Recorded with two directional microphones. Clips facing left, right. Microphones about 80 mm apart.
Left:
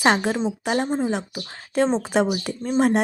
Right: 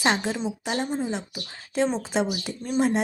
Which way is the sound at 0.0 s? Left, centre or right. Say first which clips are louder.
Left 5 dB; left.